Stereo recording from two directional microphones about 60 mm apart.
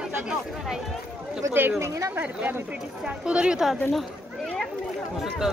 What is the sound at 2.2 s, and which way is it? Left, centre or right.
Speech, right.